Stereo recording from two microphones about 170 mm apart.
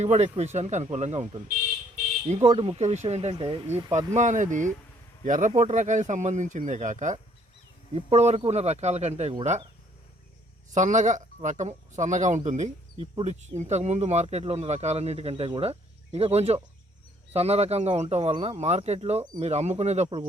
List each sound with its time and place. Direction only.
0.0 s speech: 40° right (ahead or behind)
2.5 s speech: 30° right (ahead or behind)
3.7 s speech: 15° right (ahead or behind)
3.9 s speech: 45° right (ahead or behind)
10.8 s speech: 45° right (ahead or behind)